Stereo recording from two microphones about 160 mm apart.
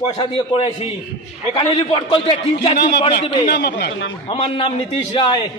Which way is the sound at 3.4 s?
90° left.